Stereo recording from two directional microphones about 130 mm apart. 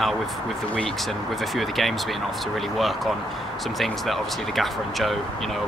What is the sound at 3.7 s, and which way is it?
Speech, centre (ahead or behind).